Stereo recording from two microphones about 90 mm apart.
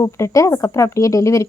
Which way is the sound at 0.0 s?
35° left (ahead or behind).